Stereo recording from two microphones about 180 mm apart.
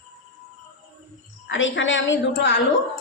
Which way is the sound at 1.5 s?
90° left.